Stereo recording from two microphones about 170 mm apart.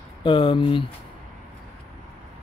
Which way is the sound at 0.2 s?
30° left (ahead or behind).